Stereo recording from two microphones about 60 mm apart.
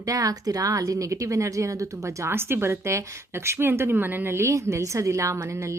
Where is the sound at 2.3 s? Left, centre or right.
Right.